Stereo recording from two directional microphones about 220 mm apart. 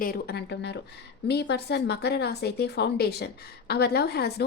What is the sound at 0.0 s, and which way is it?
A woman's voice, 45° left (ahead or behind).